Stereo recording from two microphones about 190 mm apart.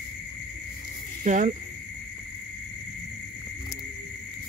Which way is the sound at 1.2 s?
40° right (ahead or behind).